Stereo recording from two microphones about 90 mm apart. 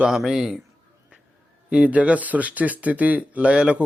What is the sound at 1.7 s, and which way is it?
Speech, 15° right (ahead or behind).